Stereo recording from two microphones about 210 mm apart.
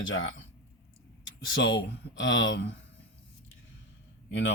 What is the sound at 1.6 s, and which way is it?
Speech, 60° left (ahead or behind).